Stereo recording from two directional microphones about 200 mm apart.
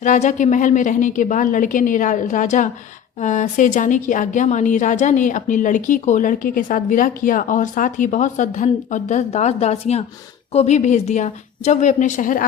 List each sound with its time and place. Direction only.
0.0 s a woman's voice: 40° left (ahead or behind)